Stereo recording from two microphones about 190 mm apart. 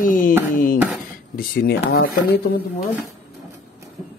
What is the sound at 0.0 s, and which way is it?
Music, 45° left (ahead or behind).